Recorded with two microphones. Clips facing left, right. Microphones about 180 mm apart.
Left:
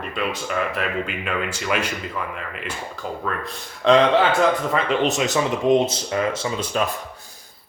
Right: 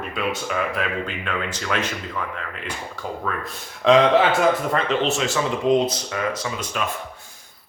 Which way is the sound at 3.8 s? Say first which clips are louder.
Even; centre (ahead or behind).